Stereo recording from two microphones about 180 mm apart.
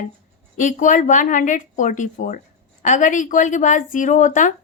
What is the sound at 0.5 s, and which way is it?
A woman's voice, 45° left (ahead or behind).